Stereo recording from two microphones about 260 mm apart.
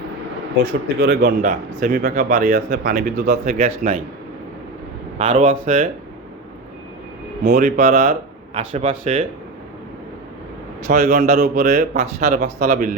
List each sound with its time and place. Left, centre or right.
0.9 s speech: right
5.1 s speech: right
7.5 s speech: right
10.8 s speech: right